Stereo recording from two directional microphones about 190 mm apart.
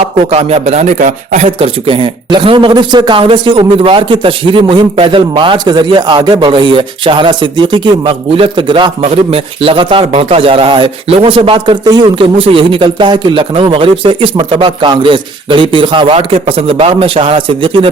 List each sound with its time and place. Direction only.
0.3 s speech: 30° right (ahead or behind)